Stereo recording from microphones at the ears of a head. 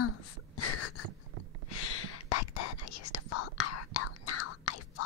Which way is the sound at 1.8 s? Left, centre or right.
Left.